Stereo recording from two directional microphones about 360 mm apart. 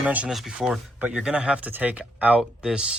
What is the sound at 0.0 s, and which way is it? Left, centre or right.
Speech, centre.